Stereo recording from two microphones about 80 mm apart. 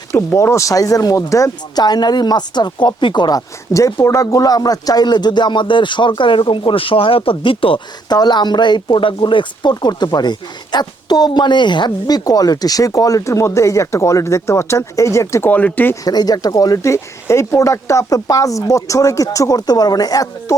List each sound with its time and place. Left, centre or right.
0.3 s speech: left
1.8 s speech: left
3.3 s speech: left
15.4 s speech: centre
16.0 s speech: left